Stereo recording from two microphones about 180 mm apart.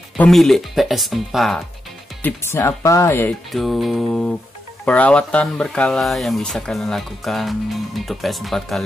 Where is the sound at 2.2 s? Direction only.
15° left (ahead or behind).